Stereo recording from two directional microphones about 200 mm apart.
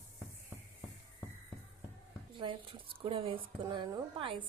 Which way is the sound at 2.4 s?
25° right (ahead or behind).